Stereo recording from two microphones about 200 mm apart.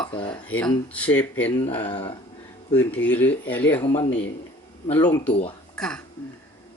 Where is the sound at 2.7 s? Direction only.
10° left (ahead or behind).